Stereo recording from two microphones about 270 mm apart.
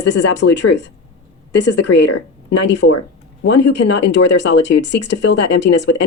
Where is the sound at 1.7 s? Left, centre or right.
Left.